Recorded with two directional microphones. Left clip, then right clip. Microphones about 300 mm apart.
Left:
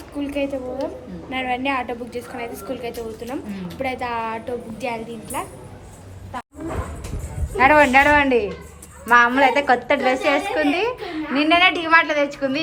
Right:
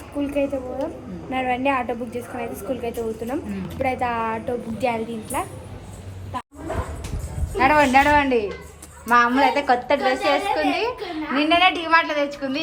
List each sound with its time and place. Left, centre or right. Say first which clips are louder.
0.2 s a woman's voice: right 1 dB; centre
7.5 s a woman's voice: left 2 dB; centre